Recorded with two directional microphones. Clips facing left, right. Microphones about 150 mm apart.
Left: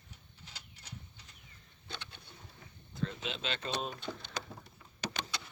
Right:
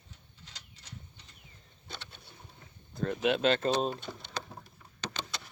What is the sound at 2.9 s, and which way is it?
Speech, 55° right (ahead or behind).